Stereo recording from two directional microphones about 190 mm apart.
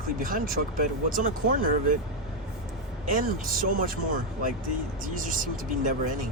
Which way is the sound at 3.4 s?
45° right (ahead or behind).